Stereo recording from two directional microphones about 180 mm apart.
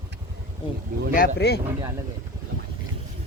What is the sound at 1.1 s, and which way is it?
Speech, 60° left (ahead or behind).